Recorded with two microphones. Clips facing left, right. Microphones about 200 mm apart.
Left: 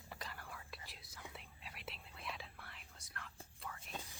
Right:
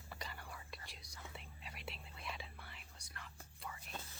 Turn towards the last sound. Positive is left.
turn(degrees=15)  # may be behind; listen again after turning